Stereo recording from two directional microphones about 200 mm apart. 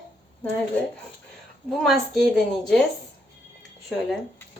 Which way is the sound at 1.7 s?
Centre (ahead or behind).